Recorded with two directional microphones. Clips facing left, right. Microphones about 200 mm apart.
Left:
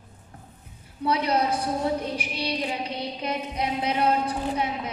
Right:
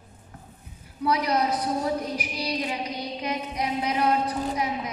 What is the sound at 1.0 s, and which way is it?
Child singing, 30° left (ahead or behind).